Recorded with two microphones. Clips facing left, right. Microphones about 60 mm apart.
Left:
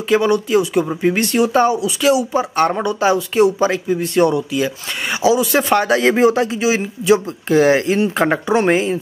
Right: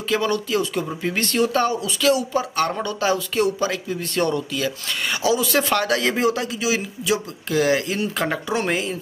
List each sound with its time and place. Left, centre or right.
0.1 s speech: centre